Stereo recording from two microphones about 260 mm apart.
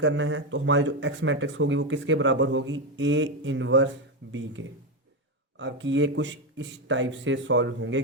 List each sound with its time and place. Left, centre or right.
0.0 s speech: right